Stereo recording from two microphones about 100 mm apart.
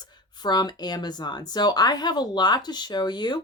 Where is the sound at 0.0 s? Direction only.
45° left (ahead or behind).